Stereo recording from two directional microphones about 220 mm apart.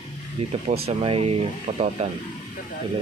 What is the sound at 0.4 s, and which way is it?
Speech, 30° right (ahead or behind).